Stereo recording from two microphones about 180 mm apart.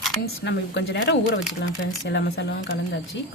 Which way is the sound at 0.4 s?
75° left (ahead or behind).